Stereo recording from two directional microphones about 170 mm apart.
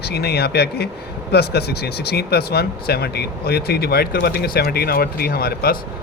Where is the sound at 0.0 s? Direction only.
70° left (ahead or behind).